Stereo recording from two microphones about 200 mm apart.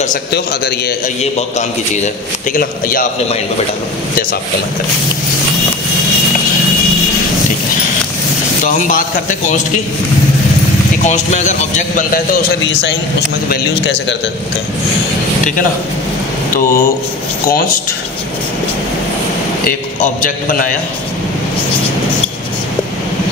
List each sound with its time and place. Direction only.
0.3 s a man's voice: 50° left (ahead or behind)
2.5 s a man's voice: 45° left (ahead or behind)
8.6 s a man's voice: 40° left (ahead or behind)
11.1 s a man's voice: 35° left (ahead or behind)
16.5 s a man's voice: 45° left (ahead or behind)
19.6 s a man's voice: 40° left (ahead or behind)